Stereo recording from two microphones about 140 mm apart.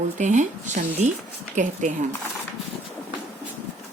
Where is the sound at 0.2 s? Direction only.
60° right (ahead or behind).